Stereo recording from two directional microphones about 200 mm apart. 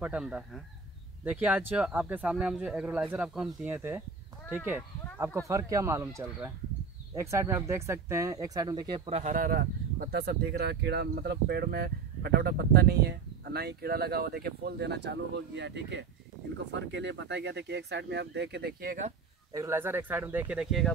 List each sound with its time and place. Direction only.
0.0 s speech: 5° right (ahead or behind)
5.2 s speech: 15° right (ahead or behind)
9.2 s speech: 40° right (ahead or behind)
19.5 s speech: 15° right (ahead or behind)